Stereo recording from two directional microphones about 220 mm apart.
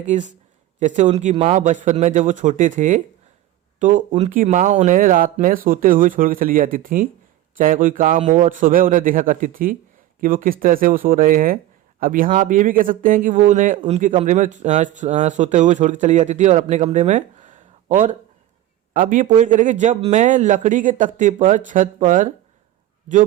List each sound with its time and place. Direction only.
0.1 s speech: 35° right (ahead or behind)